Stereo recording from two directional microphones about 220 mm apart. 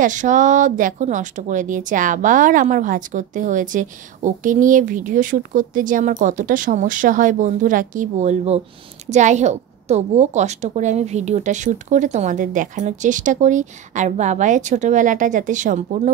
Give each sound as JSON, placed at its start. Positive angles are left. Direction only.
{"t": 0.0, "sound": "a woman's voice", "side_deg": -35}